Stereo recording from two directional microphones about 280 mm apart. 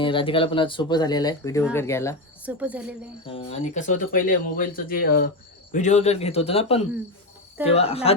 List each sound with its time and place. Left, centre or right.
0.0 s speech: centre
2.4 s a woman's voice: centre
3.2 s speech: left